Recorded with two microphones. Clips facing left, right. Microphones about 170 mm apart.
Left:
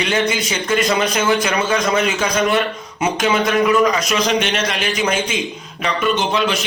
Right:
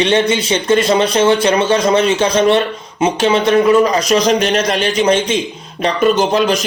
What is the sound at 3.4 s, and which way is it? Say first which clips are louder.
A man's voice: right 5 dB; 35° right (ahead or behind).